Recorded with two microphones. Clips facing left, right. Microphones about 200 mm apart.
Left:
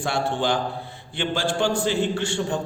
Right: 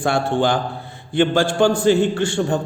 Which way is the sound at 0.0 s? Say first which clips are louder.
Right 6 dB; 50° right (ahead or behind).